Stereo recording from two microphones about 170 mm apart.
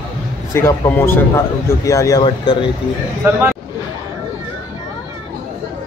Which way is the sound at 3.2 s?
15° right (ahead or behind).